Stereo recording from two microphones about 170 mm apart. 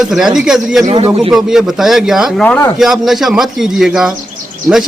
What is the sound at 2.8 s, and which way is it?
A man's voice, centre (ahead or behind).